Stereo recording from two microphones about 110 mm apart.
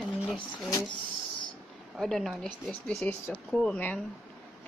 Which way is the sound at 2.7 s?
15° left (ahead or behind).